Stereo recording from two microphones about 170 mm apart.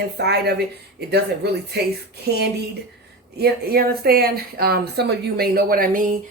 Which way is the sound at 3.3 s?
65° right (ahead or behind).